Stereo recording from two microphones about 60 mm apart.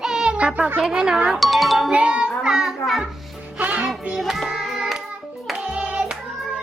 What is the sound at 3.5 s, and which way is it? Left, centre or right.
Music, right.